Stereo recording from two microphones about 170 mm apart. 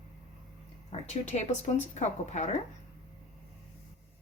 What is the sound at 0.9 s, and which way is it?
Speech, 40° left (ahead or behind).